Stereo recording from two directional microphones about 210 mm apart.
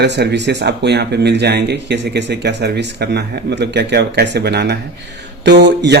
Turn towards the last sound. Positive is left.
turn(degrees=-55)  # may be behind; listen again after turning